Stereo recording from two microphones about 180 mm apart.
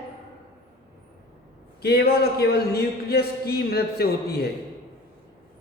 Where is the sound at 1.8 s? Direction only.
65° left (ahead or behind).